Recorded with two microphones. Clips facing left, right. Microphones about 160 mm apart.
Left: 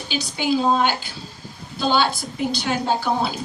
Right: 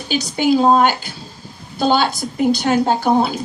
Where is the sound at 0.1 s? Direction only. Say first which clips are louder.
Right 6 dB; 45° right (ahead or behind).